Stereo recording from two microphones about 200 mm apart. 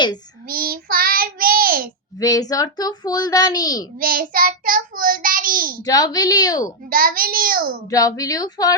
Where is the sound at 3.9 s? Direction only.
45° right (ahead or behind).